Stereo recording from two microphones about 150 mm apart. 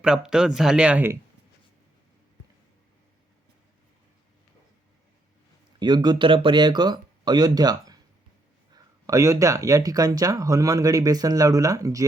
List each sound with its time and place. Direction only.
0.0 s speech: 5° right (ahead or behind)
5.8 s speech: 30° right (ahead or behind)